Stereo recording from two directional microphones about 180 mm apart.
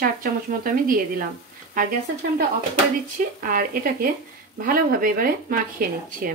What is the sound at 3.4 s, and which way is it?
Speech, 55° right (ahead or behind).